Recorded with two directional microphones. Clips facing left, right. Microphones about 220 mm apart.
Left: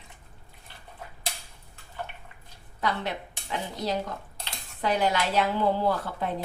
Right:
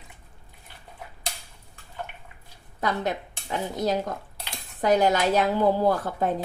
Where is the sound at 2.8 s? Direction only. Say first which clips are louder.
Right 3 dB; 45° right (ahead or behind).